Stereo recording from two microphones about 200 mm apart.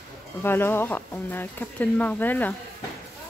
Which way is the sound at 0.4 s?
10° left (ahead or behind).